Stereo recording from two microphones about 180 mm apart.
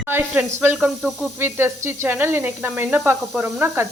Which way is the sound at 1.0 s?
Centre (ahead or behind).